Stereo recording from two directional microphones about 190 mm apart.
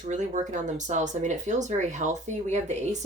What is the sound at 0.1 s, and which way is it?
Speech, 40° right (ahead or behind).